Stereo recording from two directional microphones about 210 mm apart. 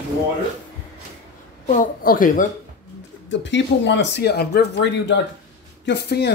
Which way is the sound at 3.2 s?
60° left (ahead or behind).